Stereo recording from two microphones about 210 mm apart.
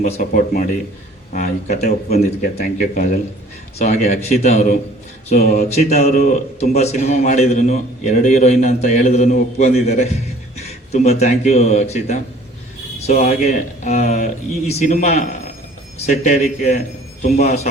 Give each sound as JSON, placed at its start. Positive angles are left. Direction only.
{"t": 0.0, "sound": "a man's voice", "side_deg": 40}
{"t": 2.4, "sound": "a man's voice", "side_deg": 45}
{"t": 5.9, "sound": "a man's voice", "side_deg": 35}